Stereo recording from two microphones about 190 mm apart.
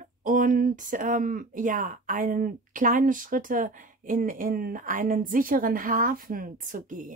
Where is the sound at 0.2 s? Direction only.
45° right (ahead or behind).